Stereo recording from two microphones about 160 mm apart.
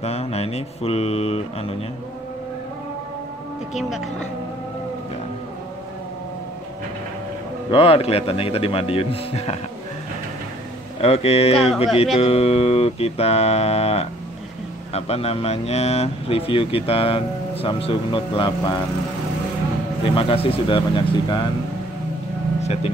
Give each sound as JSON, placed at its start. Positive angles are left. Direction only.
{"t": 0.0, "sound": "speech", "side_deg": 40}
{"t": 3.7, "sound": "speech", "side_deg": 0}
{"t": 7.7, "sound": "speech", "side_deg": 35}
{"t": 11.0, "sound": "speech", "side_deg": 40}
{"t": 20.0, "sound": "speech", "side_deg": 35}